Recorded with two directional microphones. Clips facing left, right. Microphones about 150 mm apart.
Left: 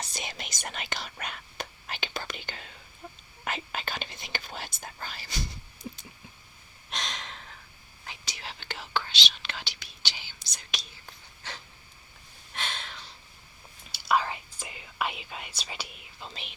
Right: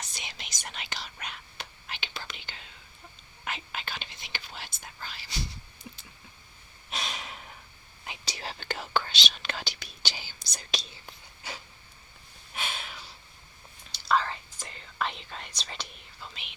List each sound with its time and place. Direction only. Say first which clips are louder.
0.0 s whispering: left 5 dB; 45° left (ahead or behind)
6.9 s a sound: right 1 dB; 5° right (ahead or behind)
8.2 s whispering: right 5 dB; 35° right (ahead or behind)
11.4 s a sound: right 1 dB; 10° right (ahead or behind)
13.9 s whispering: even; 10° left (ahead or behind)
16.3 s speech: left 4 dB; 35° left (ahead or behind)